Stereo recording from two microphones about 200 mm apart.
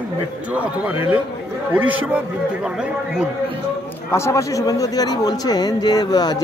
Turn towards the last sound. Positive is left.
turn(degrees=20)  # may be behind; listen again after turning